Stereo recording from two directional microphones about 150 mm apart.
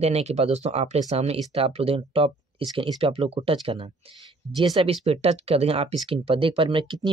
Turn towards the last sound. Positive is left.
turn(degrees=-35)  # may be behind; listen again after turning